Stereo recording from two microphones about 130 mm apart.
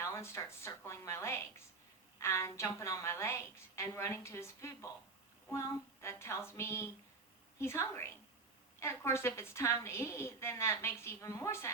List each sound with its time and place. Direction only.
0.0 s a woman's voice: 20° left (ahead or behind)